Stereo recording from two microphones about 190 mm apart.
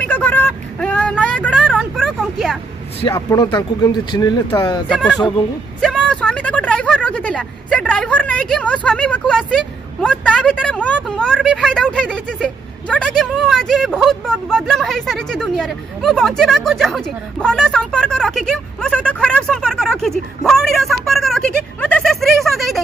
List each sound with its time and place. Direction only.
0.0 s vehicle: 10° left (ahead or behind)
3.1 s speech: 20° left (ahead or behind)
4.8 s speech: 5° left (ahead or behind)